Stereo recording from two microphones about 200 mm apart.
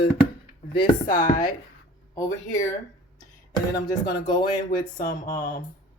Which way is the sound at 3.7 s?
20° left (ahead or behind).